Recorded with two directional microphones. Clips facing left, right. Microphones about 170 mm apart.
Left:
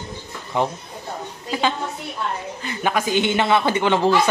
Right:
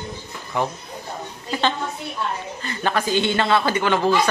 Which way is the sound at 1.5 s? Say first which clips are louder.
Even; 10° left (ahead or behind).